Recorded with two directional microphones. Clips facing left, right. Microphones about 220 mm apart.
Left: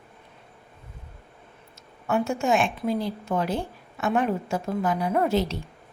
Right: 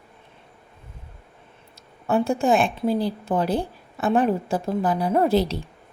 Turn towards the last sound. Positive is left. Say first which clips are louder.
# right 4 dB
turn(degrees=-35)  # may be behind; listen again after turning